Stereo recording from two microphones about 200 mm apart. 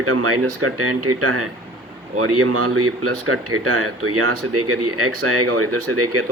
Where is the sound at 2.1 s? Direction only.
90° right.